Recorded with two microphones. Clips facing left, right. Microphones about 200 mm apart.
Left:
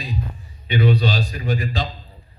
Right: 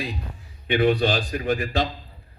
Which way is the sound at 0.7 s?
50° right (ahead or behind).